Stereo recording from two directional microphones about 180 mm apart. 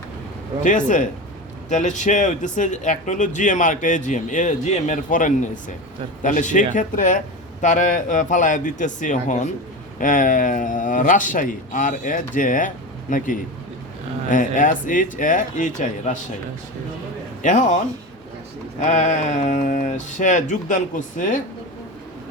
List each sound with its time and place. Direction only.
0.6 s speech: 45° left (ahead or behind)
17.4 s speech: 45° left (ahead or behind)
18.8 s speech: 45° left (ahead or behind)